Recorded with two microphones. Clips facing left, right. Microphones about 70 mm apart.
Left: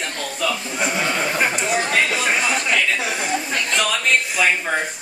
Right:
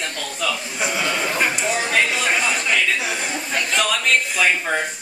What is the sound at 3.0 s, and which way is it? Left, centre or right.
Speech, centre.